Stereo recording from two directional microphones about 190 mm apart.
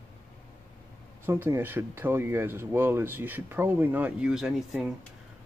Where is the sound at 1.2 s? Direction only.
15° right (ahead or behind).